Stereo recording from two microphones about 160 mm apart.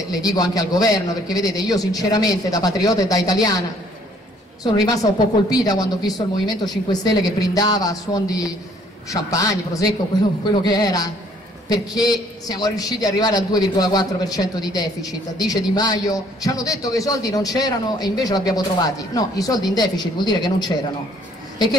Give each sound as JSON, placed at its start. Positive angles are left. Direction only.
{"t": 0.1, "sound": "a man's voice", "side_deg": 25}
{"t": 4.7, "sound": "a man's voice", "side_deg": 25}